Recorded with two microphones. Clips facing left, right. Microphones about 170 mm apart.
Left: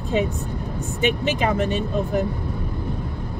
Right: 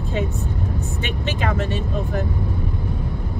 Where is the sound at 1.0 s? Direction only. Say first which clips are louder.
Left 7 dB; 15° left (ahead or behind).